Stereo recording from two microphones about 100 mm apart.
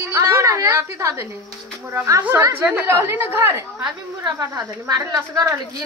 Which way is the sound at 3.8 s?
40° right (ahead or behind).